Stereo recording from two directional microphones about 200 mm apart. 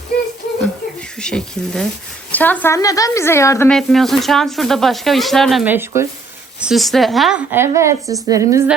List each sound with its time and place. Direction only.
1.2 s a woman's voice: 5° left (ahead or behind)
3.7 s speech: centre (ahead or behind)
6.6 s speech: centre (ahead or behind)